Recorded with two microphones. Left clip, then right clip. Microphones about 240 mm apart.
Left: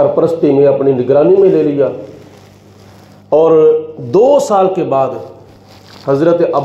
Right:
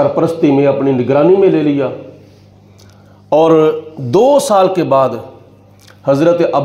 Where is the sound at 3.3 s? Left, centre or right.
Right.